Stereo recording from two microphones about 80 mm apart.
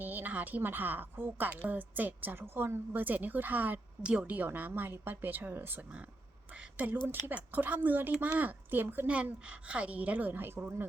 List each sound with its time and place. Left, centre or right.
0.0 s a woman's voice: right
6.5 s a sound: centre
7.1 s a woman's voice: right